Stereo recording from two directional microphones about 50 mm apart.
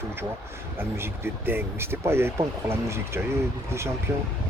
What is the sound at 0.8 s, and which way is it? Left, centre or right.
Speech, right.